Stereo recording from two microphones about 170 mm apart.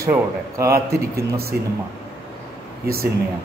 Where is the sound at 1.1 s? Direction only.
65° right (ahead or behind).